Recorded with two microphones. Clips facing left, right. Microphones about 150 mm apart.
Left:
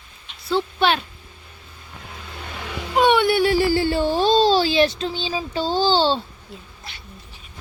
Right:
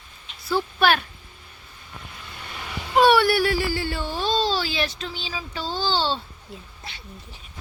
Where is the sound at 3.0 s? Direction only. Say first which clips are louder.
Left 1 dB; 20° left (ahead or behind).